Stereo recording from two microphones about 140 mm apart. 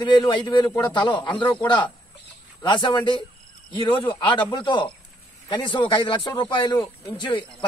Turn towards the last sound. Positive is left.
turn(degrees=35)  # may be behind; listen again after turning